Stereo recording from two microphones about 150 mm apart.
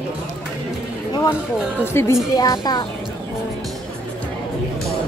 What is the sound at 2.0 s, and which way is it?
Speech, 15° left (ahead or behind).